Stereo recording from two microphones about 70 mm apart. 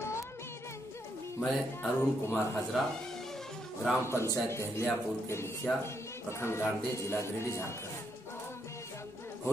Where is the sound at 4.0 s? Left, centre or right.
Left.